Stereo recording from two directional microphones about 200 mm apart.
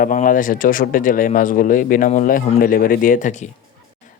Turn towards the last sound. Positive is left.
turn(degrees=40)  # may be behind; listen again after turning